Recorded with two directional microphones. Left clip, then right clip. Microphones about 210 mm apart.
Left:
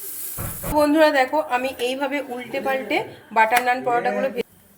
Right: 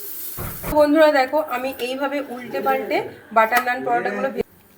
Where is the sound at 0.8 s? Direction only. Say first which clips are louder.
Right 2 dB; 30° left (ahead or behind).